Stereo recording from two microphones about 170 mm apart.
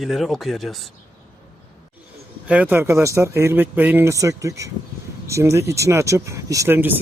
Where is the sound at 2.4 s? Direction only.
10° right (ahead or behind).